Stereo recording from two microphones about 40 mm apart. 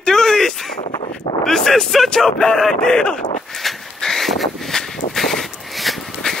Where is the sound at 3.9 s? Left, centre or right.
Centre.